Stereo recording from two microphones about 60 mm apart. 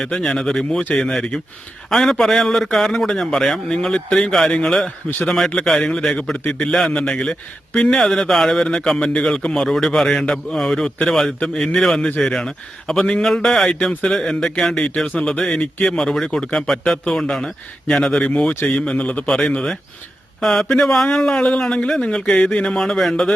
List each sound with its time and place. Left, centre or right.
0.0 s a man's voice: centre
7.9 s a man's voice: centre
19.3 s speech: centre